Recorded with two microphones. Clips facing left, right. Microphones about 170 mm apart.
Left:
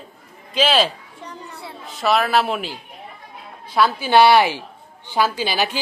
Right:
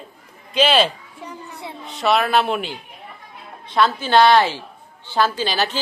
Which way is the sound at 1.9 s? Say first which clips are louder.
Even; centre (ahead or behind).